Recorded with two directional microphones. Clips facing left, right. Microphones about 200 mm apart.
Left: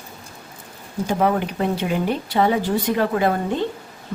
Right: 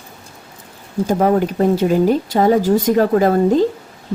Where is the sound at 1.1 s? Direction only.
40° right (ahead or behind).